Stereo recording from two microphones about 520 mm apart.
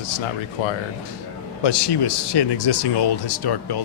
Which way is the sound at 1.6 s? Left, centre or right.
Left.